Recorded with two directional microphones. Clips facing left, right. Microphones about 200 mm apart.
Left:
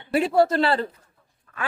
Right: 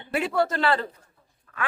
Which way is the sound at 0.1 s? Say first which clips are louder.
Left 5 dB; 35° left (ahead or behind).